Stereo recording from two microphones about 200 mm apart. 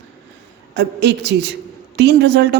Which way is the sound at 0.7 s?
60° right (ahead or behind).